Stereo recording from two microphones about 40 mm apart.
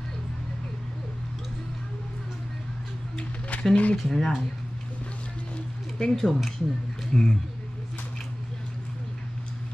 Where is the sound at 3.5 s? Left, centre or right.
Left.